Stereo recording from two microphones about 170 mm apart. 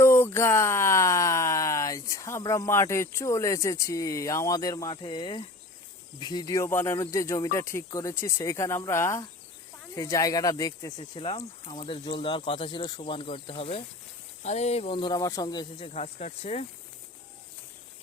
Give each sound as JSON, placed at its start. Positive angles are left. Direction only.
{"t": 0.0, "sound": "speech", "side_deg": 15}
{"t": 15.9, "sound": "speech", "side_deg": 40}